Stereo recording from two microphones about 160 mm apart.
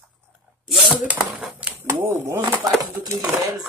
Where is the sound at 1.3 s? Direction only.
10° right (ahead or behind).